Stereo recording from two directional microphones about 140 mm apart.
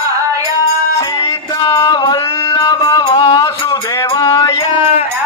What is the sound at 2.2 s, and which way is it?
Music, 20° left (ahead or behind).